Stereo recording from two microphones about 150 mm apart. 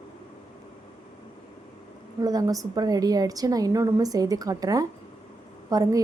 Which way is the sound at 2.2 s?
25° right (ahead or behind).